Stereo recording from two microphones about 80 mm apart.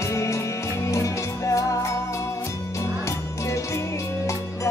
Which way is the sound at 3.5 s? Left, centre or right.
Left.